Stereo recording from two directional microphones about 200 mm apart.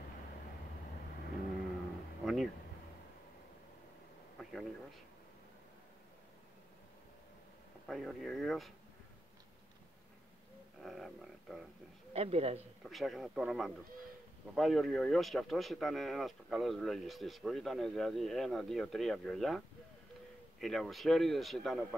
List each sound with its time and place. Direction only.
2.2 s speech: centre (ahead or behind)
4.4 s a sound: centre (ahead or behind)
7.9 s speech: centre (ahead or behind)
10.8 s a sound: centre (ahead or behind)
12.1 s a man's voice: 30° right (ahead or behind)
12.8 s speech: centre (ahead or behind)
20.6 s speech: centre (ahead or behind)